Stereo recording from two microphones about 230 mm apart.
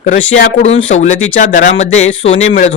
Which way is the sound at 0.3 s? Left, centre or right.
Left.